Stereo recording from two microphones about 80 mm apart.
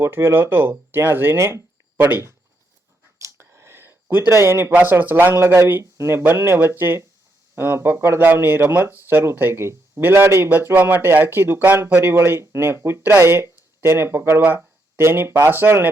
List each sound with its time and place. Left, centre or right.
0.0 s speech: right
3.2 s a sound: right
4.7 s speech: right
5.3 s speech: right